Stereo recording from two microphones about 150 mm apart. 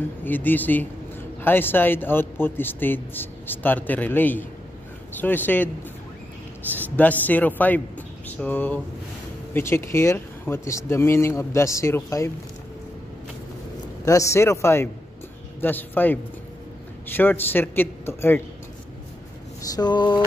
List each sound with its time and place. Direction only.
0.2 s a man's voice: 10° left (ahead or behind)
14.0 s speech: 20° left (ahead or behind)
19.7 s a sound: 30° left (ahead or behind)